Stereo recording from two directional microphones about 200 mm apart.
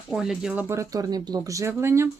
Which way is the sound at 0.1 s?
Centre (ahead or behind).